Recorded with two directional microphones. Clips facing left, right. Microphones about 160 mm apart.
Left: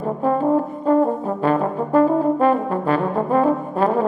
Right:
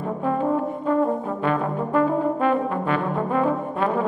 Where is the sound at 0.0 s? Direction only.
35° left (ahead or behind).